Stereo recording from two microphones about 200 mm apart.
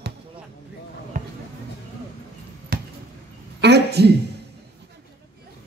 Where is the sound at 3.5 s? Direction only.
55° right (ahead or behind).